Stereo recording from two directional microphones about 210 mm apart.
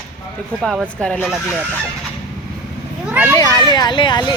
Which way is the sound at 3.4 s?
20° left (ahead or behind).